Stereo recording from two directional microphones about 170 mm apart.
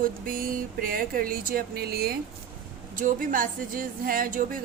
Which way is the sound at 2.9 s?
55° right (ahead or behind).